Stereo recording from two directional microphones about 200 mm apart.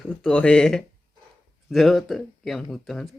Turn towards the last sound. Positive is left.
turn(degrees=0)  # may be behind; listen again after turning